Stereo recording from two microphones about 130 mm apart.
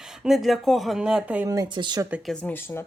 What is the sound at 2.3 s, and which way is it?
Speech, 15° left (ahead or behind).